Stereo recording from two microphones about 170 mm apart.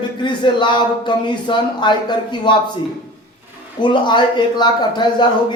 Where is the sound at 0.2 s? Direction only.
25° left (ahead or behind).